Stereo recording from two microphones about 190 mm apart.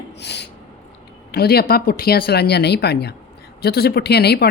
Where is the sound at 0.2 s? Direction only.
65° left (ahead or behind).